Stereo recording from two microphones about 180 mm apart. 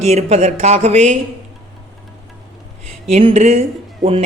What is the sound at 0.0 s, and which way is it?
Speech, 35° right (ahead or behind).